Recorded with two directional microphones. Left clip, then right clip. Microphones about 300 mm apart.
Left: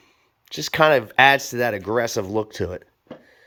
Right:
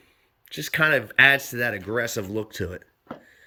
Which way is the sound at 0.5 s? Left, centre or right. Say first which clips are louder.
Left 4 dB; centre.